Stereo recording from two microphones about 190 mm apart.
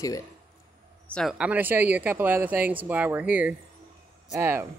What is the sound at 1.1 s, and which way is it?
Speech, 5° right (ahead or behind).